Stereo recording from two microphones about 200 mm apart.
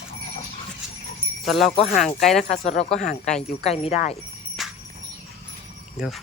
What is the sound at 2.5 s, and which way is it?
Speech, 35° left (ahead or behind).